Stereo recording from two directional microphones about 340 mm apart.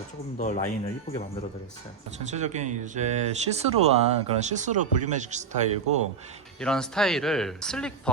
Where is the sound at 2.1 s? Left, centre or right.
Centre.